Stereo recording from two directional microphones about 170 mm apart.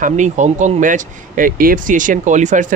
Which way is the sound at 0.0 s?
45° right (ahead or behind).